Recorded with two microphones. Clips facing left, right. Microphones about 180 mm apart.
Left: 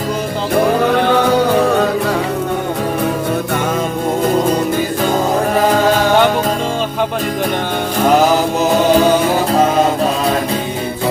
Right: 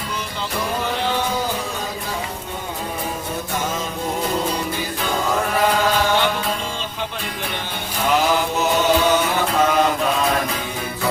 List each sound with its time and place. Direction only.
0.5 s music: 60° left (ahead or behind)
5.5 s music: 45° left (ahead or behind)
9.0 s mantra: 35° left (ahead or behind)